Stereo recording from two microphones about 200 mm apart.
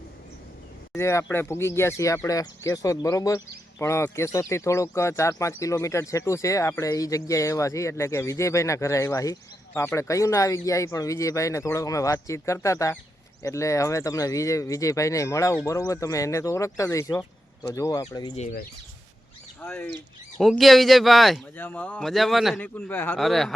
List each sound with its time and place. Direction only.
0.9 s speech: 15° left (ahead or behind)
18.3 s speech: 40° left (ahead or behind)
19.6 s speech: 10° left (ahead or behind)